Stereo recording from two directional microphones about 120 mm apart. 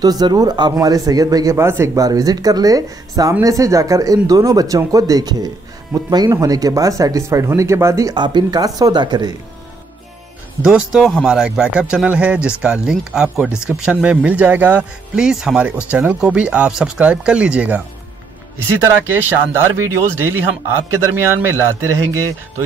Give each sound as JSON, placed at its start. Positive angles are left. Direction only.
{"t": 0.0, "sound": "speech", "side_deg": -35}
{"t": 10.6, "sound": "speech", "side_deg": -5}
{"t": 18.9, "sound": "speech", "side_deg": -20}